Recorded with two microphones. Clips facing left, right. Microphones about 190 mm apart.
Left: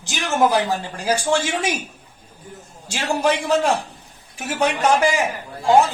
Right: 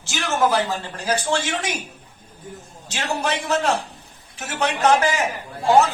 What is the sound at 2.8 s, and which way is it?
A man's voice, 10° left (ahead or behind).